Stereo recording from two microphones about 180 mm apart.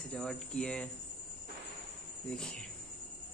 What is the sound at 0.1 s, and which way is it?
Speech, 5° left (ahead or behind).